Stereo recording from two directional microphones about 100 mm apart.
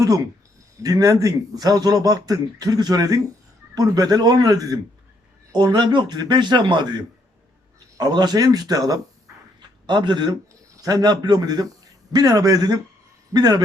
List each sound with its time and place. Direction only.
0.8 s a man's voice: 35° right (ahead or behind)
7.9 s a man's voice: 45° right (ahead or behind)
9.8 s a man's voice: 50° right (ahead or behind)